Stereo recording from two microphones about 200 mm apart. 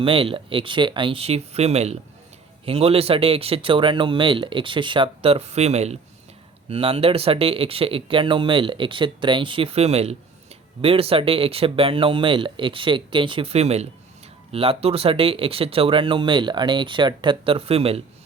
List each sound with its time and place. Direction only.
0.0 s speech: 25° right (ahead or behind)